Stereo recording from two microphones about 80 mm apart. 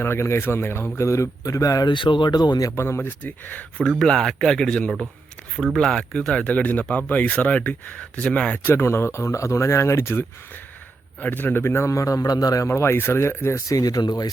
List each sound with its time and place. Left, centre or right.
0.0 s a man's voice: left
1.9 s speech: left
2.6 s speech: left
3.8 s speech: centre
8.6 s speech: left
11.2 s a man's voice: left
12.6 s speech: left